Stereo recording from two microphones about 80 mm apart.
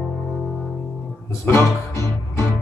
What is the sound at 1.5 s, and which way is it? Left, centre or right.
Speech, left.